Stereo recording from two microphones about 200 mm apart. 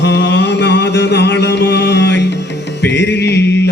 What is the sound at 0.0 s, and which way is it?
Music, 60° left (ahead or behind).